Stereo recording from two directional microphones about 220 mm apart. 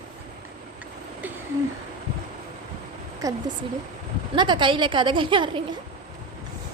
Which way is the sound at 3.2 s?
15° right (ahead or behind).